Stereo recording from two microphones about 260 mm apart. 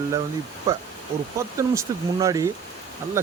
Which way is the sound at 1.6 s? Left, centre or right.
Centre.